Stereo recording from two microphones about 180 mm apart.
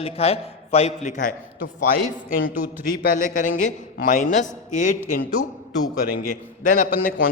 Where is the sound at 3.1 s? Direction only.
45° left (ahead or behind).